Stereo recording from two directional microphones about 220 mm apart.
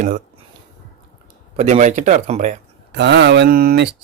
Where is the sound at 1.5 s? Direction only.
30° right (ahead or behind).